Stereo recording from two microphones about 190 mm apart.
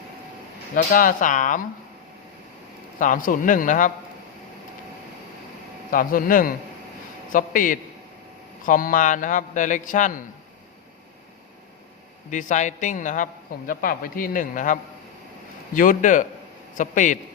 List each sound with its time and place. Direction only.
0.9 s a man's voice: 45° left (ahead or behind)
3.0 s a man's voice: 45° left (ahead or behind)
5.9 s a man's voice: 45° left (ahead or behind)
12.3 s a woman's voice: 40° left (ahead or behind)